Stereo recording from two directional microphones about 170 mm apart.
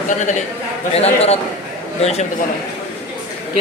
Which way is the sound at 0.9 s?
35° left (ahead or behind).